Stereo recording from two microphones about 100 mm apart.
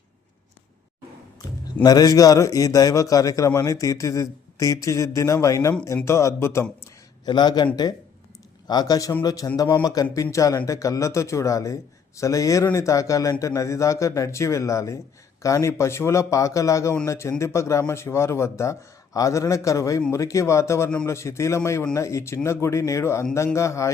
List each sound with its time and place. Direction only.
1.8 s a man's voice: 40° left (ahead or behind)
7.3 s a man's voice: 45° left (ahead or behind); by 23.9 s 30° left (ahead or behind)